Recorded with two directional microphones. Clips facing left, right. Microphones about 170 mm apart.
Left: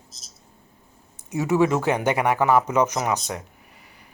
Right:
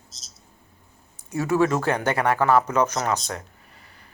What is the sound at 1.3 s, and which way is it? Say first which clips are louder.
Speech: left 1 dB; 20° left (ahead or behind).